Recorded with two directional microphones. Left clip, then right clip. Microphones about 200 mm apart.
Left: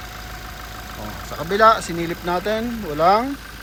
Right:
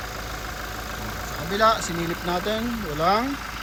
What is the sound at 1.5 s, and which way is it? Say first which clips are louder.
Speech: left 6 dB; 5° right (ahead or behind).